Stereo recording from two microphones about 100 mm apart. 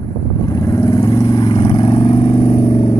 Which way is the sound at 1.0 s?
50° left (ahead or behind).